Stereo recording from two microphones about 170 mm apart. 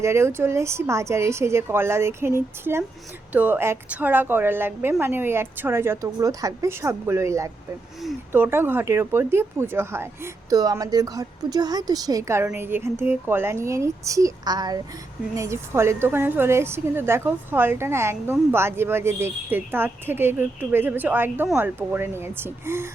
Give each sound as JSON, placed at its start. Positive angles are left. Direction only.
{"t": 0.0, "sound": "a woman's voice", "side_deg": -15}
{"t": 21.8, "sound": "a woman's voice", "side_deg": -15}